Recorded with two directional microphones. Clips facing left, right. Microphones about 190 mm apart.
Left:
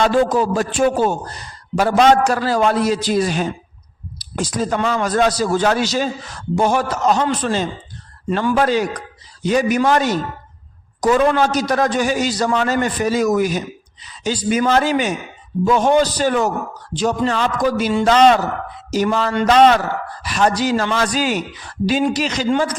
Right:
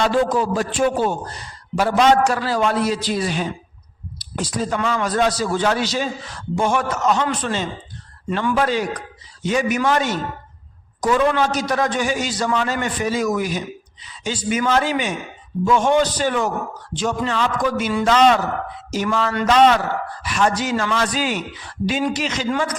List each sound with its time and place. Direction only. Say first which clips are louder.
0.0 s a man's voice: left 3 dB; 40° left (ahead or behind)